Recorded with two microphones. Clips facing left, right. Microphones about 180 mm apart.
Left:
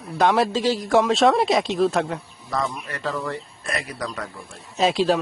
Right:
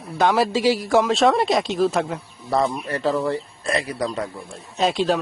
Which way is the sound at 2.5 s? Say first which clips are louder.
Right 6 dB; 30° right (ahead or behind).